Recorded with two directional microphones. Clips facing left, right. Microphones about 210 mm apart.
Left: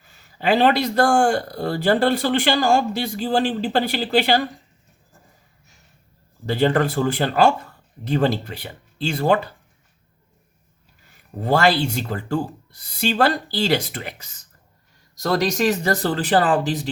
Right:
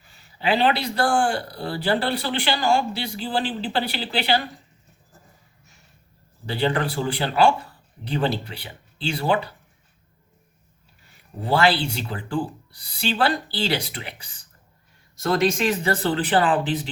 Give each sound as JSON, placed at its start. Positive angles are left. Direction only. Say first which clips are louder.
{"t": 0.3, "sound": "speech", "louder": "left 4 dB", "side_deg": 45}
{"t": 6.4, "sound": "speech", "louder": "left 5 dB", "side_deg": 45}
{"t": 11.4, "sound": "speech", "louder": "left 2 dB", "side_deg": 45}